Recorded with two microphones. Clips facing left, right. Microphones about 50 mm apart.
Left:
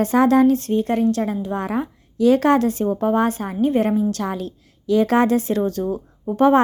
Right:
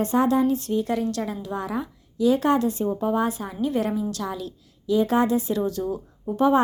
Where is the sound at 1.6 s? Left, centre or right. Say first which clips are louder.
Left 5 dB; left.